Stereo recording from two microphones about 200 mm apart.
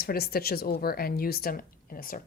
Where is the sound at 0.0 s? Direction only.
50° left (ahead or behind).